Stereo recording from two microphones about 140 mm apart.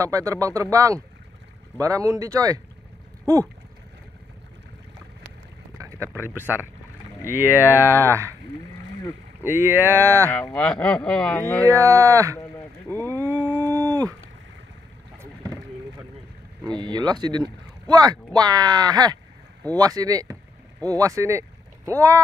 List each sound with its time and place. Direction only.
0.0 s speech: 25° right (ahead or behind)
5.8 s a sound: 20° right (ahead or behind)
6.2 s speech: 15° right (ahead or behind)
9.4 s speech: 15° right (ahead or behind)
10.5 s speech: 10° left (ahead or behind)
11.6 s speech: 20° right (ahead or behind)
12.9 s a sound: 20° right (ahead or behind)
15.1 s rowboat: 25° right (ahead or behind)
16.6 s speech: 30° right (ahead or behind)